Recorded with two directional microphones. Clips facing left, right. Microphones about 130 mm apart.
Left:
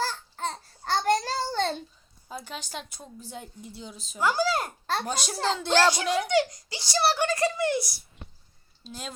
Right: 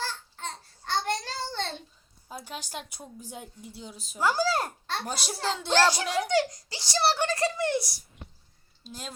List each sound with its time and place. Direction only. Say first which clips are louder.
0.0 s babbling: left 5 dB; 40° left (ahead or behind)
2.3 s a woman's voice: left 1 dB; 10° right (ahead or behind)
4.2 s a child's voice: even; 35° right (ahead or behind)
5.0 s a woman's voice: left 1 dB; 5° right (ahead or behind)
5.7 s a child's voice: left 1 dB; 35° right (ahead or behind)
8.8 s speech: left 2 dB; 5° right (ahead or behind)